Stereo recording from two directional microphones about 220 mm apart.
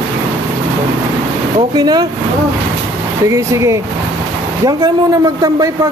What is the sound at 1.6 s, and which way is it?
Speech, 20° right (ahead or behind).